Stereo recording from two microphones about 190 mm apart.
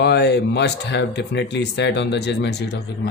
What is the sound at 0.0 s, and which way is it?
Speech, 60° left (ahead or behind).